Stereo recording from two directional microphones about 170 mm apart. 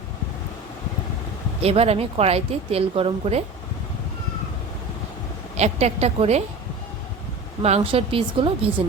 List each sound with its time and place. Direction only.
1.6 s a woman's voice: 35° right (ahead or behind)
5.5 s a woman's voice: 40° right (ahead or behind)
7.6 s a woman's voice: 35° right (ahead or behind)